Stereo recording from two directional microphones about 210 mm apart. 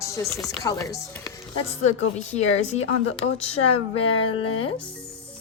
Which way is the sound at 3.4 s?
30° left (ahead or behind).